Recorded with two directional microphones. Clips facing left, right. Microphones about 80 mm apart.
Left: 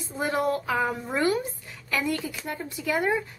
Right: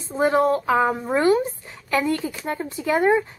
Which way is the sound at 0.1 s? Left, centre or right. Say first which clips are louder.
Right 7 dB; right.